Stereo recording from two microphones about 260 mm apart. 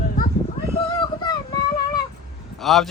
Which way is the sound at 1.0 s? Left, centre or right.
Centre.